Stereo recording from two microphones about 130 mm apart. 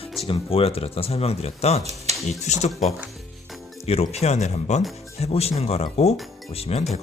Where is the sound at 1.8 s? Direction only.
55° right (ahead or behind).